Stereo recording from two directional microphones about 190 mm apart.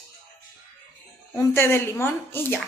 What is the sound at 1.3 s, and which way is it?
A woman's voice, 10° left (ahead or behind).